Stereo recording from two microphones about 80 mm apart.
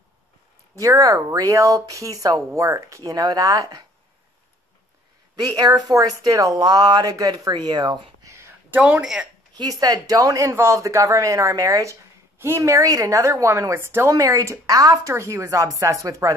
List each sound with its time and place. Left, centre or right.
0.7 s speech: right
5.3 s speech: right
8.7 s speech: right
9.0 s speech: centre
9.6 s speech: right
15.1 s speech: right